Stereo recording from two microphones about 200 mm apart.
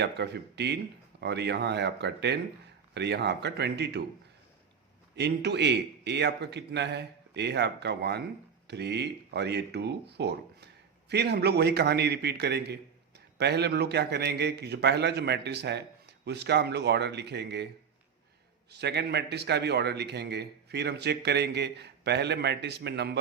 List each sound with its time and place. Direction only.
0.0 s a man's voice: 60° right (ahead or behind)
5.1 s a man's voice: 55° right (ahead or behind)
18.7 s a man's voice: 55° right (ahead or behind)